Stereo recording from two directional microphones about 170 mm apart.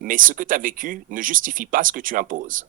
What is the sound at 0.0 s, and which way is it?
Speech, 50° right (ahead or behind).